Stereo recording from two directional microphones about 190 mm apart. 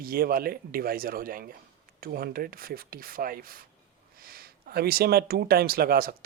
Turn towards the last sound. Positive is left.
turn(degrees=-50)  # may be behind; listen again after turning